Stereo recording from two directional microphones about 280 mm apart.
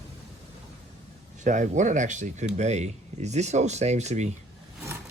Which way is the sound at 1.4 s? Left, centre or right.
Right.